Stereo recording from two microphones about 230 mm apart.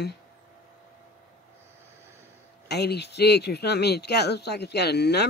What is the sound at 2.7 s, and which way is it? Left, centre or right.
Speech, left.